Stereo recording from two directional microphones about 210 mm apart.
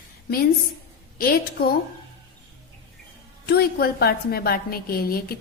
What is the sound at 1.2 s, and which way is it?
Speech, 45° left (ahead or behind).